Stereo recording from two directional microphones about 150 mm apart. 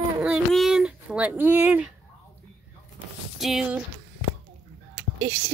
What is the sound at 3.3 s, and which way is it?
Speech, centre (ahead or behind).